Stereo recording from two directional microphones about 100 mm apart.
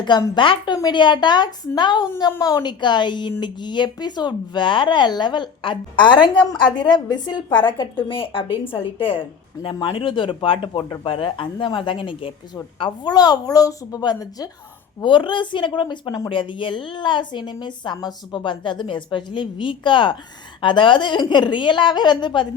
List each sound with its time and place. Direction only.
0.3 s a woman's voice: 55° left (ahead or behind)
12.8 s a woman's voice: 45° left (ahead or behind)
15.0 s a woman's voice: 55° left (ahead or behind)